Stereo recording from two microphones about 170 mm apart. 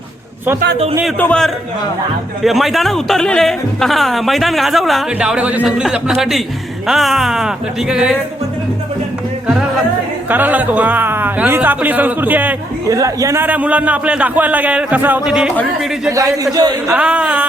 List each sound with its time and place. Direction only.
1.2 s speech: 5° left (ahead or behind)
10.2 s a man's voice: 10° right (ahead or behind)
16.0 s a man's voice: 20° right (ahead or behind)
16.8 s a man's voice: 5° right (ahead or behind)